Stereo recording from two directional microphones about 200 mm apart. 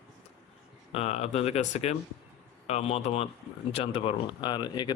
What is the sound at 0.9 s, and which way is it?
Speech, 30° left (ahead or behind).